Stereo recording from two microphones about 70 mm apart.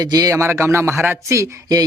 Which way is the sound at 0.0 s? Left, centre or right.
Right.